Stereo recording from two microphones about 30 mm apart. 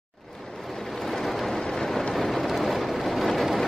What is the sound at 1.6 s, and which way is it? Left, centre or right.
Rain, left.